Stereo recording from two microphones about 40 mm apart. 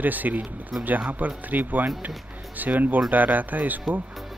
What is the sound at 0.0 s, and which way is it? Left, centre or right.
Speech, right.